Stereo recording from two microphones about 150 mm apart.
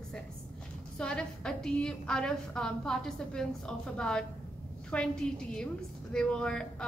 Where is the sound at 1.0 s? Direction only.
5° left (ahead or behind).